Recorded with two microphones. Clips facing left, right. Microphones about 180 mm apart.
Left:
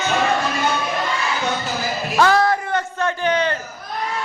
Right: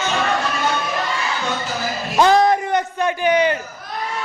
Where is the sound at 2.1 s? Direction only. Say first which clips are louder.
Right 3 dB; 20° right (ahead or behind).